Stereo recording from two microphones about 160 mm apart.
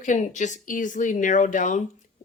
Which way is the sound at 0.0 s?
50° left (ahead or behind).